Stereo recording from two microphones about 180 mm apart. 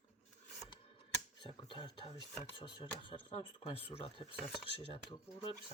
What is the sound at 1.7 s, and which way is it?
Speech, 25° left (ahead or behind).